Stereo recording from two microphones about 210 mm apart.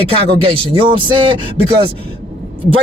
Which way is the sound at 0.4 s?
25° right (ahead or behind).